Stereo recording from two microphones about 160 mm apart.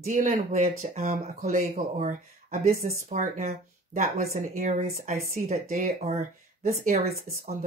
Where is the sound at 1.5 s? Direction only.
55° right (ahead or behind).